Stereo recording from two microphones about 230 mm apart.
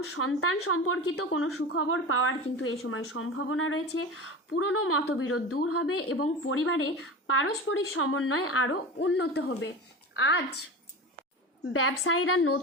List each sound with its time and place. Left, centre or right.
0.0 s a woman's voice: left
11.7 s a woman's voice: left